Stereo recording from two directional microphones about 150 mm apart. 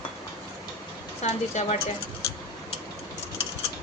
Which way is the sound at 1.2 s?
50° left (ahead or behind).